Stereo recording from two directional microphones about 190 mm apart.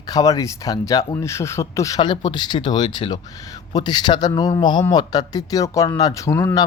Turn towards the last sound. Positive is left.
turn(degrees=15)  # may be behind; listen again after turning